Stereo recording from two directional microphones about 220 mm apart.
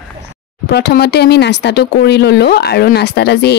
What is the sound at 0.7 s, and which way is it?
A woman's voice, 45° left (ahead or behind).